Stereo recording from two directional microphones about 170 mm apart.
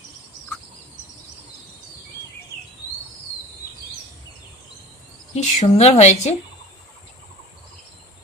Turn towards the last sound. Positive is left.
turn(degrees=40)  # may be behind; listen again after turning